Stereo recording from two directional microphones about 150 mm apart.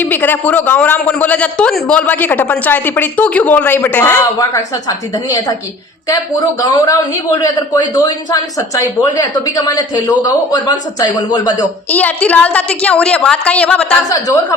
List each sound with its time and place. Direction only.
0.0 s a man's voice: 15° left (ahead or behind)
4.4 s speech: 25° left (ahead or behind)
6.6 s speech: 25° left (ahead or behind)
11.9 s a man's voice: 10° left (ahead or behind)